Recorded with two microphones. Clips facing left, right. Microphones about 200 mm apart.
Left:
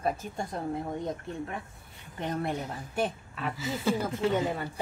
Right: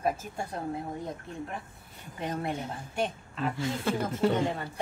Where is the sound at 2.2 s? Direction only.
Centre (ahead or behind).